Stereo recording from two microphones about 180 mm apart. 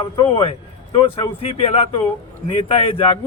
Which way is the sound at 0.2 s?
30° left (ahead or behind).